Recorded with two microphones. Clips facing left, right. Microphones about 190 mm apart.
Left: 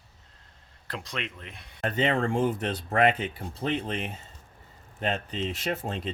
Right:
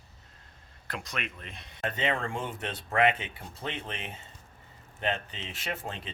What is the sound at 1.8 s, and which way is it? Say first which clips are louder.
Speech: left 5 dB; 35° left (ahead or behind).